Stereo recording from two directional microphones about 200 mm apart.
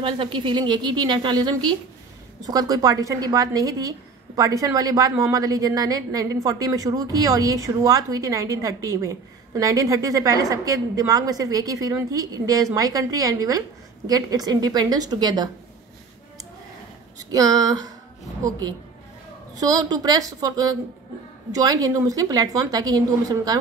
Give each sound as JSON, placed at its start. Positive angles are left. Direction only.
{"t": 0.0, "sound": "a woman's voice", "side_deg": -25}
{"t": 17.3, "sound": "a woman's voice", "side_deg": -20}